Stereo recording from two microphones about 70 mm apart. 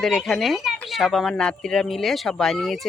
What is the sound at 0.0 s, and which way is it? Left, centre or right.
Speech, centre.